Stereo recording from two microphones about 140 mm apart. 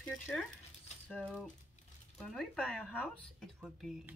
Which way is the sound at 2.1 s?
5° left (ahead or behind).